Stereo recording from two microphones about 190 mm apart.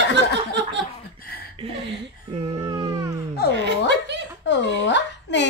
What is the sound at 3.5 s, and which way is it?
Chuckle, 65° right (ahead or behind).